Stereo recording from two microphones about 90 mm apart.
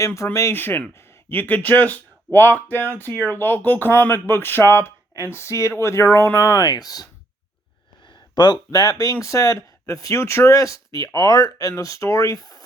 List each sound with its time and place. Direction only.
0.0 s speech: 35° left (ahead or behind)
0.5 s speech: 25° left (ahead or behind)
6.5 s speech: 45° left (ahead or behind)